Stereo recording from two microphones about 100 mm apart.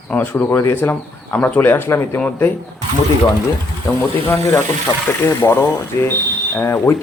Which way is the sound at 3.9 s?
30° left (ahead or behind).